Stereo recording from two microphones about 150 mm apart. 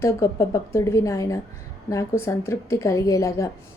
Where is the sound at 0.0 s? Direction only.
20° left (ahead or behind).